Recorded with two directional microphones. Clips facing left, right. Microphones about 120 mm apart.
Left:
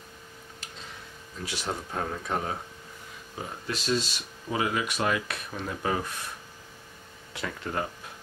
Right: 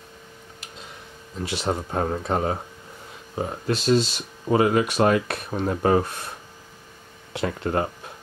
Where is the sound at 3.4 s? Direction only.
45° right (ahead or behind).